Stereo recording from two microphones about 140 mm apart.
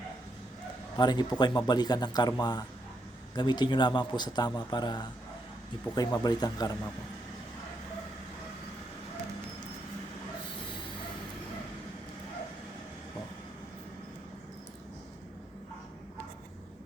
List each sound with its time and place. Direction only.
0.9 s speech: 30° left (ahead or behind)